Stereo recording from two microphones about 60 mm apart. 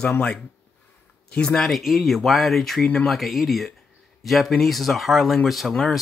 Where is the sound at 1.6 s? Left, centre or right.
Centre.